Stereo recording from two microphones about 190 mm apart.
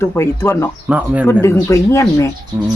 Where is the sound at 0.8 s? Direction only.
5° right (ahead or behind).